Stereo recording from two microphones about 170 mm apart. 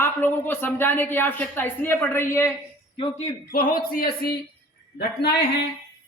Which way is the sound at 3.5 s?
60° left (ahead or behind).